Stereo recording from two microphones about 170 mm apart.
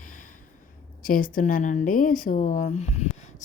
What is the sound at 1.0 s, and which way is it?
Speech, 55° left (ahead or behind).